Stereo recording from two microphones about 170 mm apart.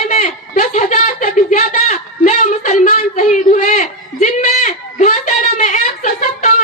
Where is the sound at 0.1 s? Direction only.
50° left (ahead or behind).